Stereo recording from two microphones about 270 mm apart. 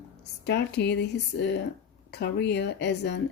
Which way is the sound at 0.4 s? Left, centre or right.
Left.